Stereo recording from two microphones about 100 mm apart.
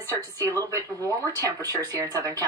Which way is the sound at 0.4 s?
35° right (ahead or behind).